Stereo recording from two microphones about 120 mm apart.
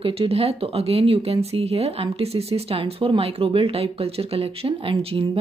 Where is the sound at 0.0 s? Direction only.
50° right (ahead or behind).